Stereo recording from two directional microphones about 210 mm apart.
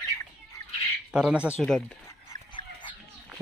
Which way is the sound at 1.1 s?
5° right (ahead or behind).